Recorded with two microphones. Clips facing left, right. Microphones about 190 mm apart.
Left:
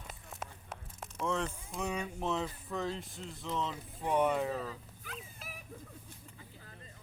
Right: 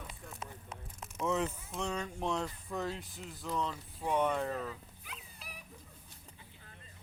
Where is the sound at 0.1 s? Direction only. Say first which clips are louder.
Even; 50° left (ahead or behind).